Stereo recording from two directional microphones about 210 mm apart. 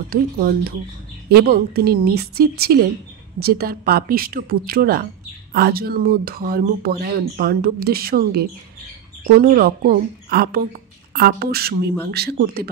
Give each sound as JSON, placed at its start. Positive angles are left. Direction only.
{"t": 0.1, "sound": "speech", "side_deg": -45}